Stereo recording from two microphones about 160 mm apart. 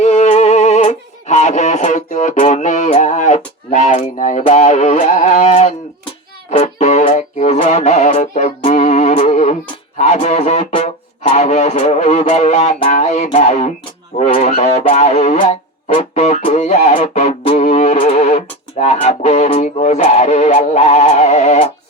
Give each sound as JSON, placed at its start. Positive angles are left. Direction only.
{"t": 0.0, "sound": "music", "side_deg": 45}
{"t": 4.4, "sound": "speech", "side_deg": 45}